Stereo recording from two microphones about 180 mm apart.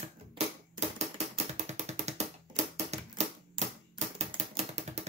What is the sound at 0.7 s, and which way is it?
Music, 40° right (ahead or behind).